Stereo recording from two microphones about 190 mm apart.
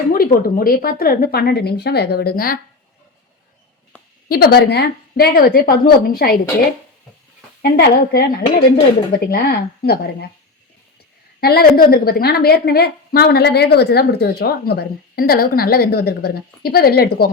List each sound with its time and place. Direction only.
0.1 s a woman's voice: 50° left (ahead or behind)
4.3 s a woman's voice: 50° left (ahead or behind)
7.6 s a woman's voice: 55° left (ahead or behind)
11.3 s a woman's voice: 55° left (ahead or behind)